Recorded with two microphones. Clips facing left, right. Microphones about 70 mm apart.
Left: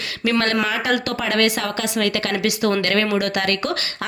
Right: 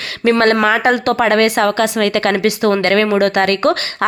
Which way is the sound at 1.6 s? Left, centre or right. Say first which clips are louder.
Right 8 dB; right.